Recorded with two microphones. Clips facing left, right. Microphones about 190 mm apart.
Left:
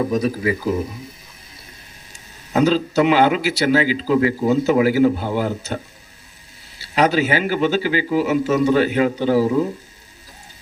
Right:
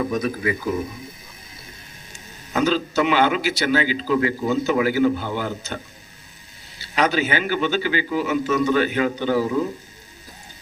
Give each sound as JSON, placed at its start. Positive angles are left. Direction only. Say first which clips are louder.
{"t": 0.0, "sound": "a man's voice", "louder": "left 3 dB", "side_deg": 35}
{"t": 2.5, "sound": "a man's voice", "louder": "left 4 dB", "side_deg": 35}
{"t": 6.8, "sound": "a man's voice", "louder": "left 4 dB", "side_deg": 35}